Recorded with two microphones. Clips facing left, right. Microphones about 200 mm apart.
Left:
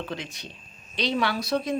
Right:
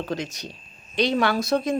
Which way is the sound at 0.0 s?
40° right (ahead or behind).